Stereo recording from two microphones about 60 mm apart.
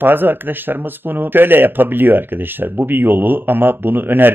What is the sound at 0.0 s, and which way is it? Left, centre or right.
Speech, right.